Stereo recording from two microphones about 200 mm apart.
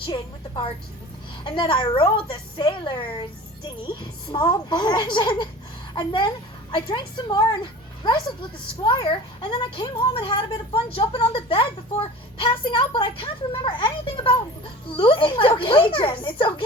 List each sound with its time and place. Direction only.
0.0 s a woman's voice: 25° left (ahead or behind)